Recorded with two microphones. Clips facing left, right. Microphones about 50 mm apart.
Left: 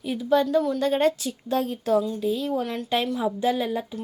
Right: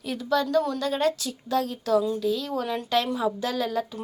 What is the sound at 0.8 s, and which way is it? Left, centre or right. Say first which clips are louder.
A woman's voice: left 3 dB; left.